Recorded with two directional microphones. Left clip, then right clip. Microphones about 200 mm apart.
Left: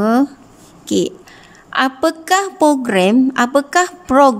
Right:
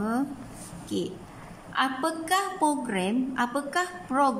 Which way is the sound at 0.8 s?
55° left (ahead or behind).